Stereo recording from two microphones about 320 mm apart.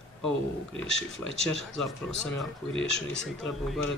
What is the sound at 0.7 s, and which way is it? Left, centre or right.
Speech, centre.